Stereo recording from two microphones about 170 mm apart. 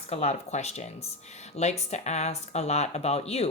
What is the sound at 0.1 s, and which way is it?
Speech, 40° left (ahead or behind).